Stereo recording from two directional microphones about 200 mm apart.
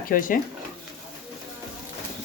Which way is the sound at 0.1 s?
45° left (ahead or behind).